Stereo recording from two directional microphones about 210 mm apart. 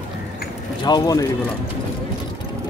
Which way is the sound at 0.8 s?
20° left (ahead or behind).